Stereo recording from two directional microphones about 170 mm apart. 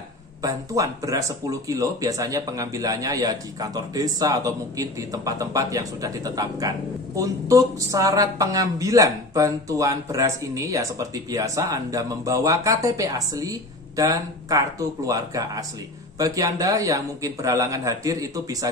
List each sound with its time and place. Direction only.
0.4 s speech: 20° right (ahead or behind)